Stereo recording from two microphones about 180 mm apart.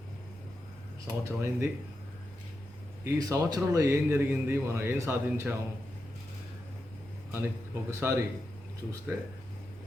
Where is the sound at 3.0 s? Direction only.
20° right (ahead or behind).